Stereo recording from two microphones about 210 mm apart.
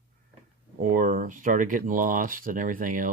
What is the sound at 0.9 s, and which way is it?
Speech, 40° right (ahead or behind).